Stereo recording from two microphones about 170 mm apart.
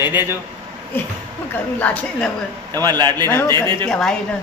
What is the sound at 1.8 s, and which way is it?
Speech, 10° left (ahead or behind).